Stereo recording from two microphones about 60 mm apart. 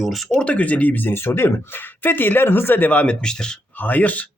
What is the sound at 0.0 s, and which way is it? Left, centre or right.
Speech, centre.